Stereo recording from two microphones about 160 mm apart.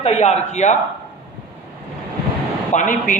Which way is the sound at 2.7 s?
55° left (ahead or behind).